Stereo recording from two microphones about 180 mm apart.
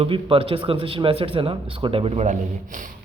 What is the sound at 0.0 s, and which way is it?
A man's voice, 30° right (ahead or behind).